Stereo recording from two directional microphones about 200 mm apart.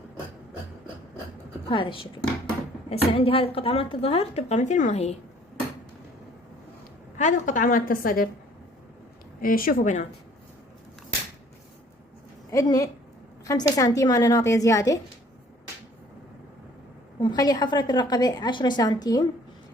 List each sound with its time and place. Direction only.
1.7 s a woman's voice: 25° left (ahead or behind)
7.2 s a woman's voice: 40° left (ahead or behind)
9.4 s a woman's voice: 45° left (ahead or behind)
12.5 s a woman's voice: 15° left (ahead or behind)
17.2 s a woman's voice: 20° left (ahead or behind)